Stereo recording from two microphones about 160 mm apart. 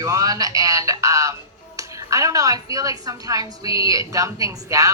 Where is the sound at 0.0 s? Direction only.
20° right (ahead or behind).